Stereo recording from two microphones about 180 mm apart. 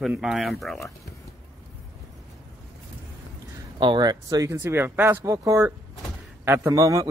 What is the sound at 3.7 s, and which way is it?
A man's voice, 25° right (ahead or behind).